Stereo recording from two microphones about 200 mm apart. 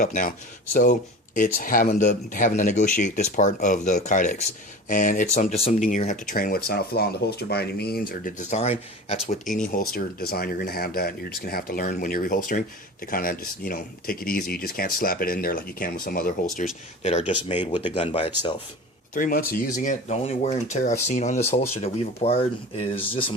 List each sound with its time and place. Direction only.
0.0 s speech: 45° left (ahead or behind)
17.0 s speech: 35° left (ahead or behind)
19.1 s speech: 45° left (ahead or behind)